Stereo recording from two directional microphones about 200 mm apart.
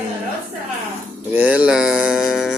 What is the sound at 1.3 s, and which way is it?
Music, 5° right (ahead or behind).